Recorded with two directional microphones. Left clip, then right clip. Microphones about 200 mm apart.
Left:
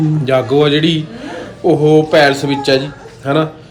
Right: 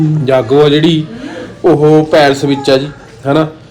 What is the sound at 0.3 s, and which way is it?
A man's voice, 10° left (ahead or behind).